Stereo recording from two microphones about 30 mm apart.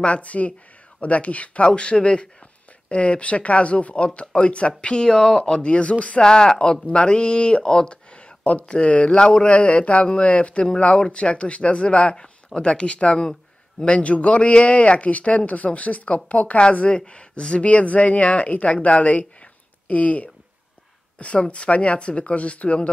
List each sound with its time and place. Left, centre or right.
0.0 s speech: left
1.8 s speech: left
2.9 s speech: left
4.9 s speech: left
5.6 s speech: left
6.2 s speech: left
9.5 s speech: left
17.6 s speech: left